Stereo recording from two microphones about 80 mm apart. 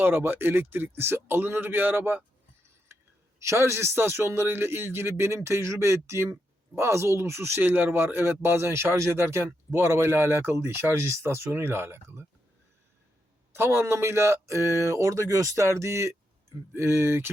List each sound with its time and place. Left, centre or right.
0.0 s a man's voice: right
3.4 s a man's voice: right
13.5 s a man's voice: right